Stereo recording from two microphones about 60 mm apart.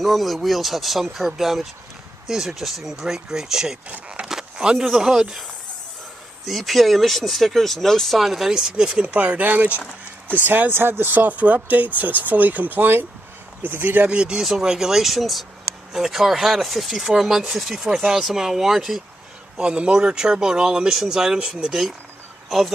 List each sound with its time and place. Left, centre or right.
0.0 s speech: centre
6.4 s speech: centre
9.0 s speech: right
9.8 s a sound: left
10.4 s speech: right
14.0 s speech: centre
19.5 s speech: centre